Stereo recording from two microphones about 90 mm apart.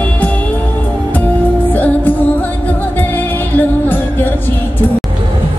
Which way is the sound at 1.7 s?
20° left (ahead or behind).